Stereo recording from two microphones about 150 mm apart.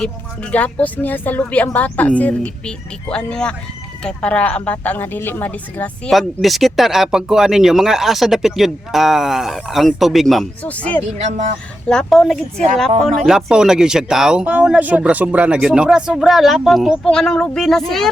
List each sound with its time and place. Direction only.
0.5 s a woman's voice: 10° left (ahead or behind)
11.2 s speech: 50° right (ahead or behind)
11.9 s a woman's voice: 5° left (ahead or behind)